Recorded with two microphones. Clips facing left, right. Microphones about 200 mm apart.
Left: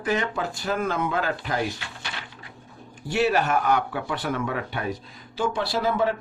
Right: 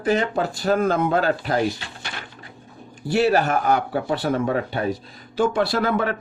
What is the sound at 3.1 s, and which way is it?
Speech, 35° right (ahead or behind).